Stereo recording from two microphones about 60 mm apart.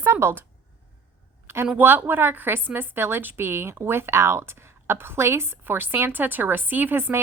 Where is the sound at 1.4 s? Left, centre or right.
Right.